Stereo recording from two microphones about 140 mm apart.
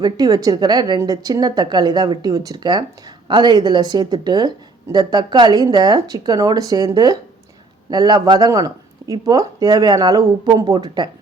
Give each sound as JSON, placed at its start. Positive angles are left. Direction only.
{"t": 0.0, "sound": "speech", "side_deg": -25}